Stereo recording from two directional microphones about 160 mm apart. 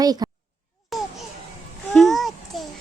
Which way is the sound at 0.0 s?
25° right (ahead or behind).